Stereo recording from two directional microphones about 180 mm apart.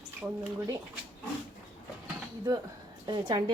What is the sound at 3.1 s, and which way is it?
Speech, 25° right (ahead or behind).